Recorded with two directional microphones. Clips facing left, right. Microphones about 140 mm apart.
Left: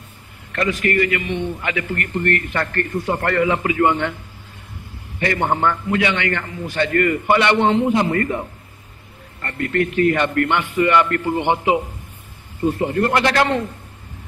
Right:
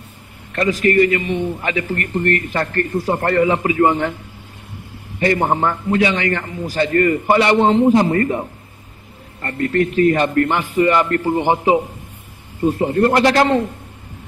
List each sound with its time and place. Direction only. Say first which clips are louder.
0.5 s a man's voice: right 4 dB; 35° right (ahead or behind)
5.2 s a man's voice: right 2 dB; 30° right (ahead or behind)